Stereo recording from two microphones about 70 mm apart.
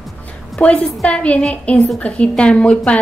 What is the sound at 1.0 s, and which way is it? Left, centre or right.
A woman's voice, centre.